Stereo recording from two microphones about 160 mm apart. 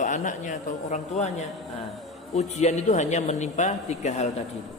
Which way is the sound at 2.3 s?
45° left (ahead or behind).